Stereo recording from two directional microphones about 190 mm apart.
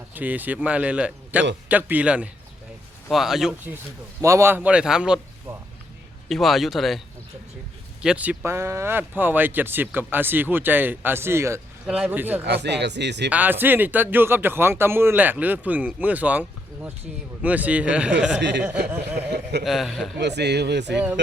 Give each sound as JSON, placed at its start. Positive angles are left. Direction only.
{"t": 0.1, "sound": "speech", "side_deg": -10}
{"t": 5.5, "sound": "music", "side_deg": -15}
{"t": 6.2, "sound": "speech", "side_deg": 0}
{"t": 8.0, "sound": "speech", "side_deg": -5}
{"t": 12.5, "sound": "speech", "side_deg": -65}
{"t": 13.3, "sound": "speech", "side_deg": -10}
{"t": 18.3, "sound": "speech", "side_deg": -65}
{"t": 19.6, "sound": "speech", "side_deg": 0}
{"t": 20.1, "sound": "speech", "side_deg": -60}